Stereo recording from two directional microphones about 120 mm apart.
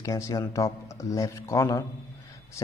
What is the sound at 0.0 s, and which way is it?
Speech, 30° left (ahead or behind).